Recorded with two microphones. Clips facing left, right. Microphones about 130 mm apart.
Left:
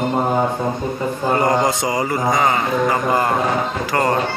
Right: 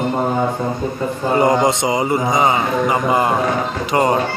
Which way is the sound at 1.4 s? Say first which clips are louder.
Right 5 dB; 20° right (ahead or behind).